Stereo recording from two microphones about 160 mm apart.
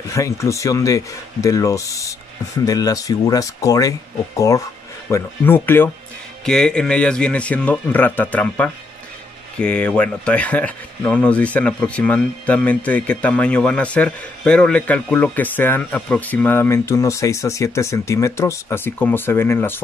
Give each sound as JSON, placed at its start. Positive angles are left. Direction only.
{"t": 0.1, "sound": "speech", "side_deg": 20}